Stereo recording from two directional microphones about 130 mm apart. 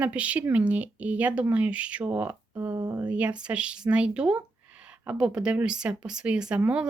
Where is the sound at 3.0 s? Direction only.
10° right (ahead or behind).